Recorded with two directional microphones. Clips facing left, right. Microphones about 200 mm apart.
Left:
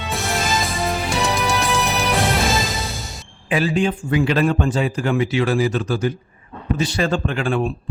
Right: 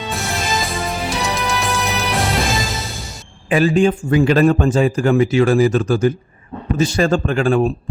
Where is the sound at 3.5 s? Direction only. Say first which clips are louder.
Right 5 dB; 45° right (ahead or behind).